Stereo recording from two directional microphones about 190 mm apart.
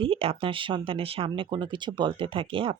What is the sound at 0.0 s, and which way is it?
Speech, 30° right (ahead or behind).